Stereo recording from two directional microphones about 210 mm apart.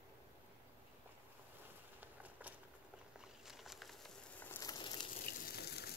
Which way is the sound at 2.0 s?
10° right (ahead or behind).